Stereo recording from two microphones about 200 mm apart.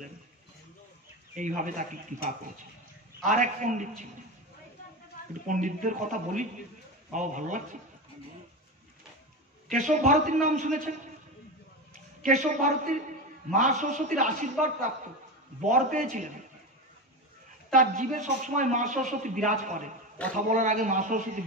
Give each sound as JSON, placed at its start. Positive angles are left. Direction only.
{"t": 1.3, "sound": "a man's voice", "side_deg": -40}
{"t": 3.3, "sound": "a man's voice", "side_deg": -40}
{"t": 5.5, "sound": "a man's voice", "side_deg": -40}
{"t": 9.8, "sound": "a man's voice", "side_deg": -40}
{"t": 12.2, "sound": "a man's voice", "side_deg": -40}
{"t": 17.7, "sound": "a man's voice", "side_deg": -40}